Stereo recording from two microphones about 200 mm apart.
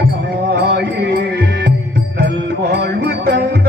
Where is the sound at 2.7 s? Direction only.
55° right (ahead or behind).